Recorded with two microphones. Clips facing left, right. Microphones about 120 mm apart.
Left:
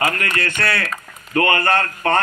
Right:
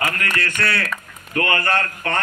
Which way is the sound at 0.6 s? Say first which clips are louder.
Left 1 dB; 30° left (ahead or behind).